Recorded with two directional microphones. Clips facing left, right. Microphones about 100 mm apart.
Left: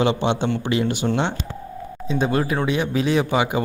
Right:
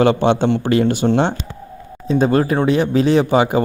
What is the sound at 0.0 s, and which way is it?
Speech, 50° right (ahead or behind).